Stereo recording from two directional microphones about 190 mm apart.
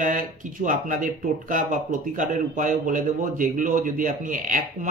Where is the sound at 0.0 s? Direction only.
45° right (ahead or behind).